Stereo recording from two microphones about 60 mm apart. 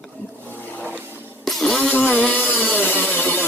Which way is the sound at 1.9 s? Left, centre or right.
Left.